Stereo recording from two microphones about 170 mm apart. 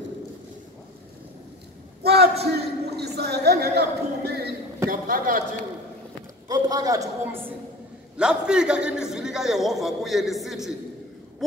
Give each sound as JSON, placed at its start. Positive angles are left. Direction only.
{"t": 2.0, "sound": "a sound", "side_deg": -70}
{"t": 3.2, "sound": "speech", "side_deg": -75}
{"t": 5.0, "sound": "a man's voice", "side_deg": -55}
{"t": 6.5, "sound": "a man's voice", "side_deg": -20}
{"t": 8.2, "sound": "a man's voice", "side_deg": -5}